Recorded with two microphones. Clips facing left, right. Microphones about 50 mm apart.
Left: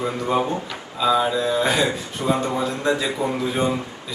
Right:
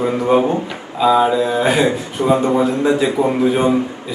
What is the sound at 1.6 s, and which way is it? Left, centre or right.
A man's voice, right.